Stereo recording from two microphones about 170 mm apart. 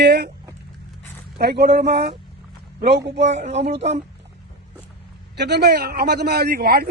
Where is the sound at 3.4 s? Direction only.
40° right (ahead or behind).